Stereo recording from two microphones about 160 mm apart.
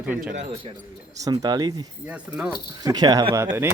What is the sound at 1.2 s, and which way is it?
Speech, 25° right (ahead or behind).